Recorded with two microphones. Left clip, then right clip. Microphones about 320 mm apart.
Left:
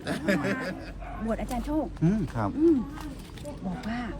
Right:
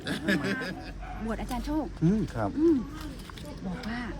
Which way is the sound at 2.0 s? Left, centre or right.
Left.